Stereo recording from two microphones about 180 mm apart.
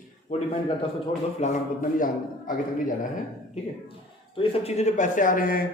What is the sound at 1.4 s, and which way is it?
A man's voice, 50° left (ahead or behind).